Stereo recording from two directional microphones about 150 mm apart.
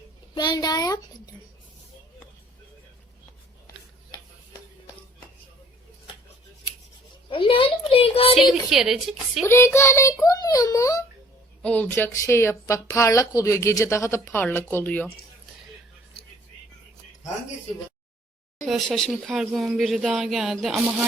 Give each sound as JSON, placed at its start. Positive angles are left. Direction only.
{"t": 0.3, "sound": "a woman's voice", "side_deg": 30}
{"t": 7.3, "sound": "a woman's voice", "side_deg": 35}
{"t": 8.4, "sound": "speech", "side_deg": 0}
{"t": 9.4, "sound": "a woman's voice", "side_deg": 15}
{"t": 11.6, "sound": "a woman's voice", "side_deg": 10}
{"t": 18.6, "sound": "speech", "side_deg": 0}